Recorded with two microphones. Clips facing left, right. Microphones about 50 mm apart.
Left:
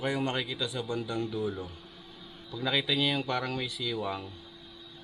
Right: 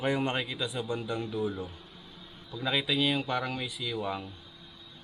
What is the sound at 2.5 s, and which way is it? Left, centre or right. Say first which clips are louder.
Speech: even; centre.